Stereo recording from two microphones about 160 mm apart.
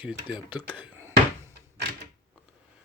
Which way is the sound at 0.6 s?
10° right (ahead or behind).